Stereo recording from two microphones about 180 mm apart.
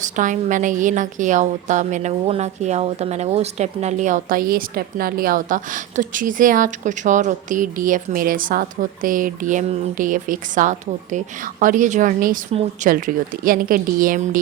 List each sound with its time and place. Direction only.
0.0 s a woman's voice: 45° right (ahead or behind)